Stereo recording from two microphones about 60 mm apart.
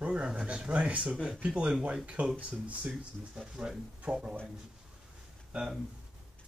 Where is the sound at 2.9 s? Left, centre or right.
Centre.